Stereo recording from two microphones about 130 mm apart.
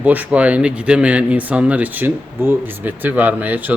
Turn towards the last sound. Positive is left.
turn(degrees=-15)  # may be behind; listen again after turning